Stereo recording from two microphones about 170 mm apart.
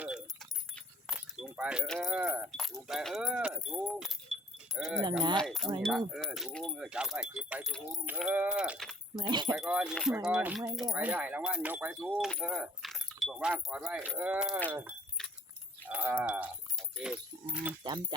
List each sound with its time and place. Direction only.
0.0 s keys jangling: centre (ahead or behind)
1.9 s speech: centre (ahead or behind)
9.3 s speech: 25° right (ahead or behind)
9.6 s speech: 5° right (ahead or behind)
15.2 s keys jangling: 5° left (ahead or behind)
15.9 s speech: 10° right (ahead or behind)